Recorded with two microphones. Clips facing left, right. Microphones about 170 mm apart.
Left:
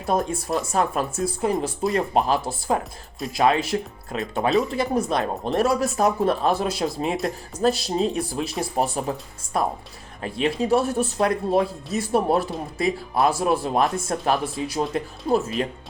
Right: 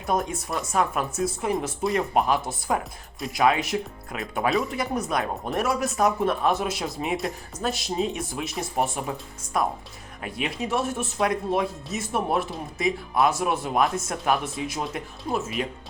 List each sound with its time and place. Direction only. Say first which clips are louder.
0.0 s speech: left 3 dB; 30° left (ahead or behind)